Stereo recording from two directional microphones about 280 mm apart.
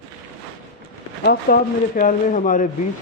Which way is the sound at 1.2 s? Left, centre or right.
Left.